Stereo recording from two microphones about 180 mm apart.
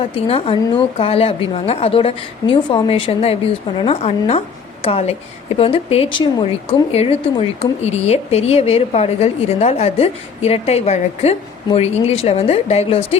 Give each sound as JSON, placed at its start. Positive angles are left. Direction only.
{"t": 0.0, "sound": "speech", "side_deg": 30}